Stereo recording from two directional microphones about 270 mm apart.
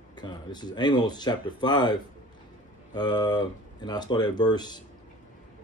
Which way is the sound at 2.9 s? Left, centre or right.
Centre.